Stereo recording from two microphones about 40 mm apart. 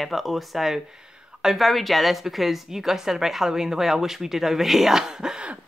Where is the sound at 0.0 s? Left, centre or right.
Centre.